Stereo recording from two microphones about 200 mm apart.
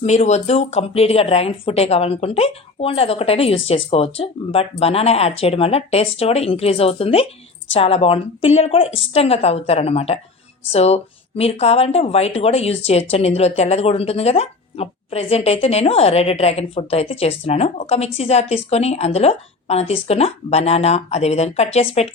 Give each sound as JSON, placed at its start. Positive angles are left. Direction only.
{"t": 0.0, "sound": "speech", "side_deg": 35}